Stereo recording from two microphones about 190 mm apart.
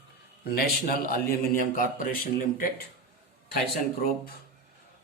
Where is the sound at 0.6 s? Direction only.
50° left (ahead or behind).